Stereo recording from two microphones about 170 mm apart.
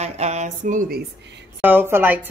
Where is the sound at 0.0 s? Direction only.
40° right (ahead or behind); by 1.0 s 55° right (ahead or behind).